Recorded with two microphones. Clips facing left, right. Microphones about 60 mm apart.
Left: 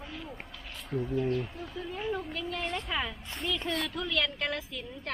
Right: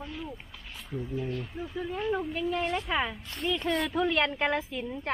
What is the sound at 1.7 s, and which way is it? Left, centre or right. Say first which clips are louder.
A woman's voice: right 4 dB; centre.